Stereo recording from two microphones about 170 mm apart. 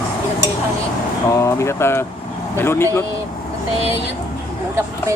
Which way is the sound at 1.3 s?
15° left (ahead or behind).